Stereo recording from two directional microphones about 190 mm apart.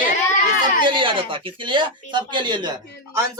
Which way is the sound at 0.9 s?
25° right (ahead or behind).